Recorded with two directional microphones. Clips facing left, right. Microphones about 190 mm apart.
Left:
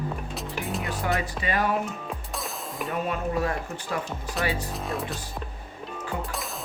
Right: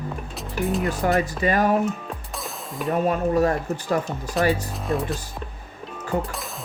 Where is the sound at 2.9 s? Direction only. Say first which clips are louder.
Right 7 dB; 40° right (ahead or behind).